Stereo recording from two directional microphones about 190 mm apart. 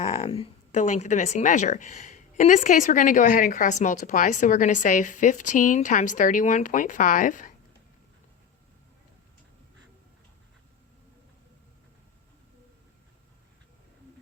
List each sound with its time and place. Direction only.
0.0 s a woman's voice: 35° left (ahead or behind)